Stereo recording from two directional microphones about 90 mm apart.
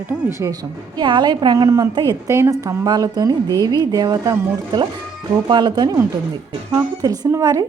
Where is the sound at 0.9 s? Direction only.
55° right (ahead or behind).